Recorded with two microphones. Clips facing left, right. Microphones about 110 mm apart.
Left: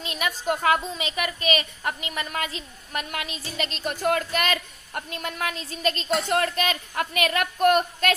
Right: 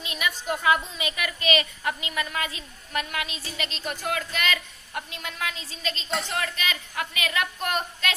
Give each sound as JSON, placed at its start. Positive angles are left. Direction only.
{"t": 0.0, "sound": "a woman's voice", "side_deg": 40}
{"t": 0.7, "sound": "a woman's voice", "side_deg": 30}